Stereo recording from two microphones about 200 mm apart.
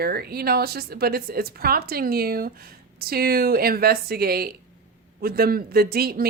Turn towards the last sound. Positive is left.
turn(degrees=-50)  # may be behind; listen again after turning